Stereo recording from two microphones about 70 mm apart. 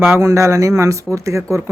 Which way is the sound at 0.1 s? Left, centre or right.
Right.